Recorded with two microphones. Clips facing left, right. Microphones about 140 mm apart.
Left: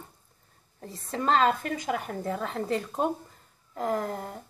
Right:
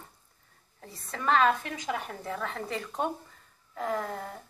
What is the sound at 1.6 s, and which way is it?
Speech, 45° left (ahead or behind).